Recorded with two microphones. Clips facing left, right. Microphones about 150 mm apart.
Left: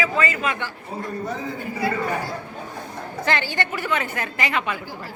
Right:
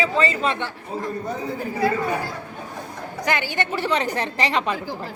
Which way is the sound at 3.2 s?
15° right (ahead or behind).